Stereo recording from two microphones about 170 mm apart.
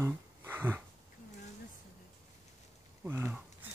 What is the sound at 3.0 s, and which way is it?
Speech, 15° right (ahead or behind).